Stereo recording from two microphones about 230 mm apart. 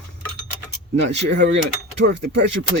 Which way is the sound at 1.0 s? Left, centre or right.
Right.